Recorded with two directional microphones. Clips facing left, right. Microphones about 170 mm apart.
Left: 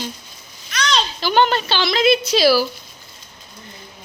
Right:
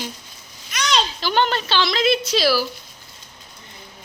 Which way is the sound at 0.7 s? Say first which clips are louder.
Left 1 dB; 15° right (ahead or behind).